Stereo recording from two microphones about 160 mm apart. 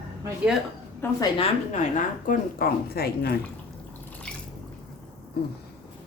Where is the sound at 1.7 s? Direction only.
55° left (ahead or behind); by 3.3 s 80° left.